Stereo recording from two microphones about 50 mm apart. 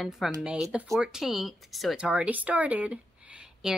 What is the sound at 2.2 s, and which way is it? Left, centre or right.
Speech, right.